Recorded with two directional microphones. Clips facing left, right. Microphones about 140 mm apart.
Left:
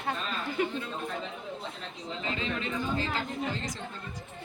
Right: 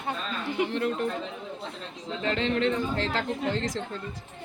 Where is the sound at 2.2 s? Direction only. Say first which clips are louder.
Right 9 dB; 85° right.